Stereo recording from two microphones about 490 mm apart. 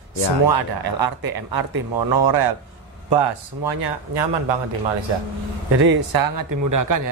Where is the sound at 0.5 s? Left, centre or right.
Right.